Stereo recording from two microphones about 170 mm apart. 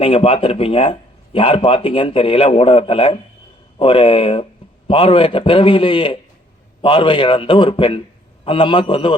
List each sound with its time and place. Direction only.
0.0 s a man's voice: 35° left (ahead or behind)